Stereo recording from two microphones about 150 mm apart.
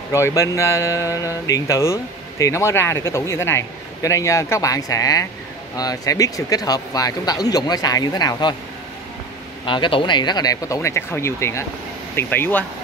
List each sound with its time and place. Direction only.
0.1 s speech: 20° left (ahead or behind)
9.7 s speech: 35° left (ahead or behind); by 12.6 s 15° left (ahead or behind)